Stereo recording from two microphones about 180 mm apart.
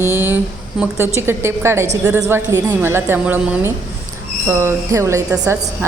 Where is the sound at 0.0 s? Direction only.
15° right (ahead or behind).